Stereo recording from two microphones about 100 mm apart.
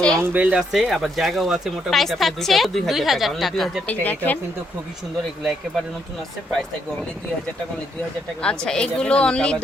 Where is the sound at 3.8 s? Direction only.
15° left (ahead or behind).